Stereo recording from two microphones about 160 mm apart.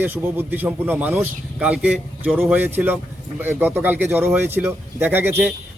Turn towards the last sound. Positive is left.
turn(degrees=-15)  # may be behind; listen again after turning